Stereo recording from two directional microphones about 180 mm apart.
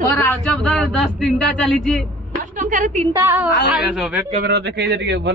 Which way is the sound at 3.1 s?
15° right (ahead or behind).